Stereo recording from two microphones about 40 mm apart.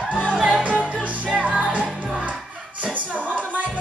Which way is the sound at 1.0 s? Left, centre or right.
Right.